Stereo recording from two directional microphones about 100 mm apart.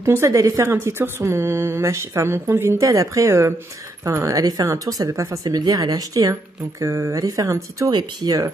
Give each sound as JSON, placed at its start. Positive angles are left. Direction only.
{"t": 0.0, "sound": "speech", "side_deg": -25}